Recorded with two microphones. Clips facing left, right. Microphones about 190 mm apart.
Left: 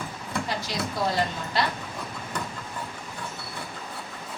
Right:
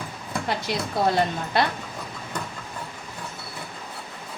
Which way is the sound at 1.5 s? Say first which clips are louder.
Right 4 dB; 60° right (ahead or behind).